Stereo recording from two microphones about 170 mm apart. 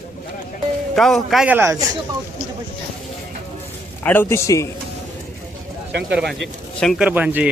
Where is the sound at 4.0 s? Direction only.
10° left (ahead or behind).